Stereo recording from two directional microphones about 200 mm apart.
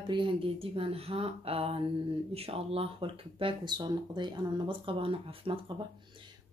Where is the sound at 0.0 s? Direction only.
25° right (ahead or behind).